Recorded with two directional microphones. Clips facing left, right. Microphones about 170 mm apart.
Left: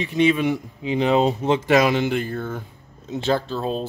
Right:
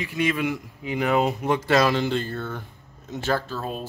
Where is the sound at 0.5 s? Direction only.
25° left (ahead or behind).